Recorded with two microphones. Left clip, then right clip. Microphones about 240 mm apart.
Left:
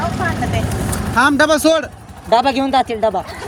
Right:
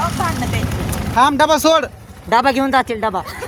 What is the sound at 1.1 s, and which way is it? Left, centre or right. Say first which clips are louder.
Speech: even; centre.